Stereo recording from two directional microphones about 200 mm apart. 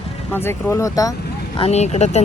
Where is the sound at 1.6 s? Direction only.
35° left (ahead or behind).